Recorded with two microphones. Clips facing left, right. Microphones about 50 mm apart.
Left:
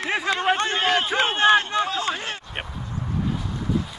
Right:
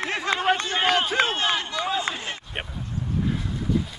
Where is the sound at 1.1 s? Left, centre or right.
Left.